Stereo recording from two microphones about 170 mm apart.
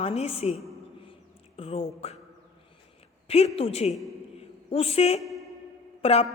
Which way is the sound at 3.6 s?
35° left (ahead or behind).